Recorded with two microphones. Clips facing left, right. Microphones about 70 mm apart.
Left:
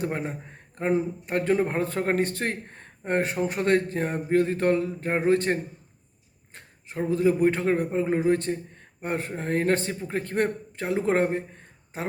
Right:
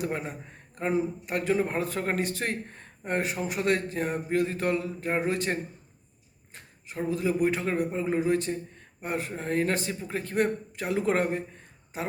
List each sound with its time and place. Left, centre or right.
0.0 s a man's voice: left